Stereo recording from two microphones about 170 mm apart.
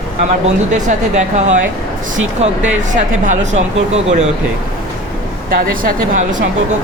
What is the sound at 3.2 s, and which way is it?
Speech, 45° right (ahead or behind).